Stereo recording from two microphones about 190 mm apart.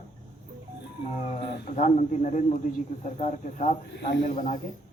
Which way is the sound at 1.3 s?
35° left (ahead or behind).